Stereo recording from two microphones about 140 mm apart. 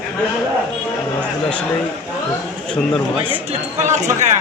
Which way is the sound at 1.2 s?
10° left (ahead or behind).